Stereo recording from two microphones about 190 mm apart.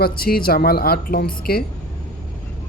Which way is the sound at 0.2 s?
50° left (ahead or behind).